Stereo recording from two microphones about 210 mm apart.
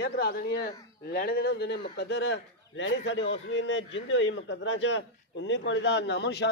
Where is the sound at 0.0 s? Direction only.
50° left (ahead or behind).